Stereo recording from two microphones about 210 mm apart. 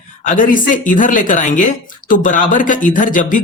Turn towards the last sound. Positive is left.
turn(degrees=40)  # may be behind; listen again after turning